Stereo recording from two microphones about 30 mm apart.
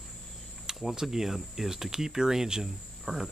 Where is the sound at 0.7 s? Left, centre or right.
Centre.